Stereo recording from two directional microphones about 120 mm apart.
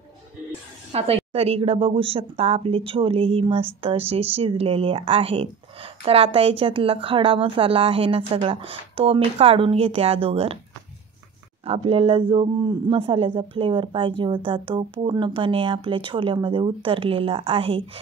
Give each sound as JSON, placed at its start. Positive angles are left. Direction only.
{"t": 0.9, "sound": "speech", "side_deg": -55}
{"t": 11.6, "sound": "speech", "side_deg": -55}
{"t": 12.9, "sound": "speech", "side_deg": -50}